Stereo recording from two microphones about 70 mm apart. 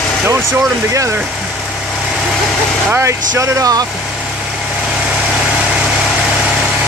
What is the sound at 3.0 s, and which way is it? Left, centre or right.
Speech, right.